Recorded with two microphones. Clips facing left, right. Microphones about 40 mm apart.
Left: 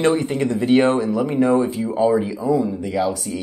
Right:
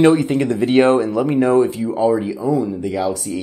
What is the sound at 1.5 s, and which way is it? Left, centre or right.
Speech, centre.